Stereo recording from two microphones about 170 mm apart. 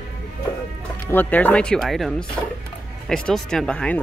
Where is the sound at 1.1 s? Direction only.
10° left (ahead or behind).